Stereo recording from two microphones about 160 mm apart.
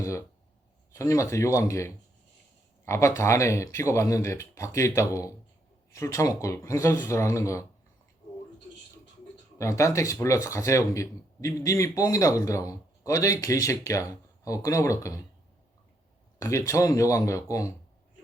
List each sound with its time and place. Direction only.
0.0 s a sound: 20° left (ahead or behind)
0.9 s speech: 20° left (ahead or behind)
9.6 s speech: 20° left (ahead or behind)
16.4 s speech: 20° left (ahead or behind)